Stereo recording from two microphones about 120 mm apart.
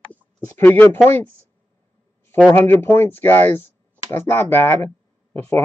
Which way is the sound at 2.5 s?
20° left (ahead or behind).